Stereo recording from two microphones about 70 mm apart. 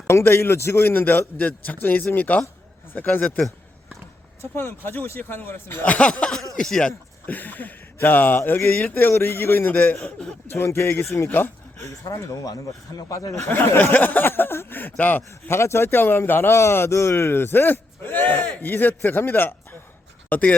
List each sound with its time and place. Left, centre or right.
0.1 s a man's voice: left
4.4 s a man's voice: left
5.8 s speech: centre
7.3 s a man's voice: left
9.9 s speech: centre
10.5 s a man's voice: left
11.8 s speech: left
13.5 s speech: left
15.3 s a man's voice: left